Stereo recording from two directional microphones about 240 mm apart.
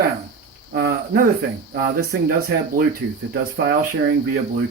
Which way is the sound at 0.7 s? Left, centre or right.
Right.